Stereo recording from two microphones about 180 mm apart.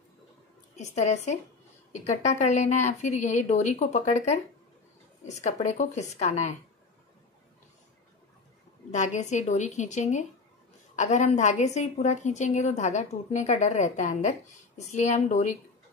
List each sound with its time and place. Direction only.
0.7 s a woman's voice: 40° left (ahead or behind)
8.9 s a woman's voice: 40° left (ahead or behind)